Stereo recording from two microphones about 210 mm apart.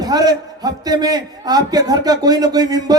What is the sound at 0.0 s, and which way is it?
A man's voice, 20° right (ahead or behind).